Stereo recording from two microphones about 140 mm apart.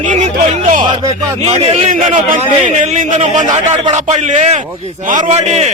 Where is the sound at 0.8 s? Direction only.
30° right (ahead or behind).